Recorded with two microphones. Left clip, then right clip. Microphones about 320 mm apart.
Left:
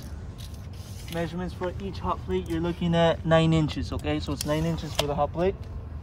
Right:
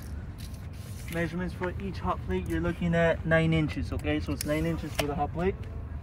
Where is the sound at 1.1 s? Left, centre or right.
Centre.